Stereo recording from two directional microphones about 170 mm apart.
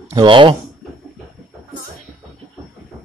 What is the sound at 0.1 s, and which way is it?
Speech, 30° right (ahead or behind).